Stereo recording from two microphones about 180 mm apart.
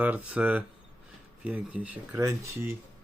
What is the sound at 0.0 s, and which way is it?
Speech, 10° right (ahead or behind).